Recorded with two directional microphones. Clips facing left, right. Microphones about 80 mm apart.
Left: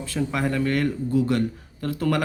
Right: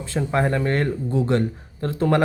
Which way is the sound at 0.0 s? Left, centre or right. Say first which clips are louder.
Right 3 dB; right.